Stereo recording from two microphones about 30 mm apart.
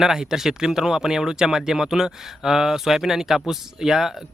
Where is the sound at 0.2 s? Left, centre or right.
Centre.